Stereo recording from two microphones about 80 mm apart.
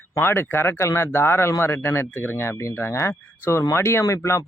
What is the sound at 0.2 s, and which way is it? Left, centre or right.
Speech, left.